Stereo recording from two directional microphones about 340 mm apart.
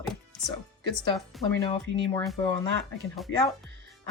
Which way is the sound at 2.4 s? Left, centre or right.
Centre.